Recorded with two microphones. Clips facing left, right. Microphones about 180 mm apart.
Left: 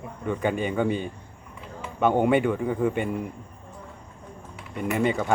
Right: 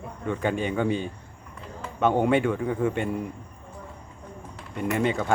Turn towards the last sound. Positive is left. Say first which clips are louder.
# left 1 dB
turn(degrees=5)  # may be behind; listen again after turning